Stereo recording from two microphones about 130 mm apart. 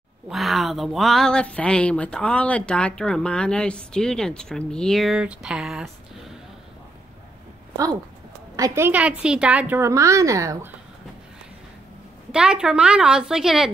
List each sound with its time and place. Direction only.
0.3 s speech: centre (ahead or behind)
7.7 s a woman's voice: 25° right (ahead or behind); by 9.8 s 10° right (ahead or behind)
9.8 s speech: 25° right (ahead or behind)
12.3 s speech: 5° right (ahead or behind)